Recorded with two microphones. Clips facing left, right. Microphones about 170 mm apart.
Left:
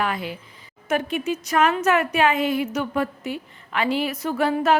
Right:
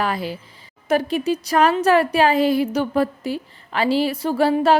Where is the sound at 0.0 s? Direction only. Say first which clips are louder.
Right 3 dB; 35° right (ahead or behind).